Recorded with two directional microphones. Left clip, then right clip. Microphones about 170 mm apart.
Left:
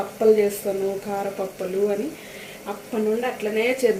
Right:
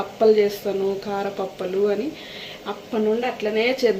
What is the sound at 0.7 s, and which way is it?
Speech, 5° right (ahead or behind).